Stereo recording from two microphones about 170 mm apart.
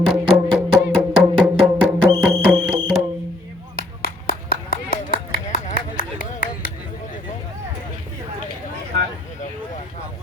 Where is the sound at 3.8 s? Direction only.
60° left (ahead or behind).